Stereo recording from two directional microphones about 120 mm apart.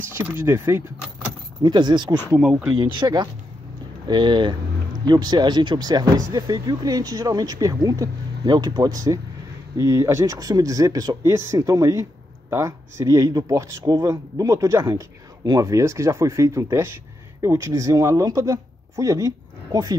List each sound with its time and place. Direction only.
0.1 s speech: 20° right (ahead or behind)
1.6 s speech: 40° right (ahead or behind)
8.8 s speech: 25° right (ahead or behind)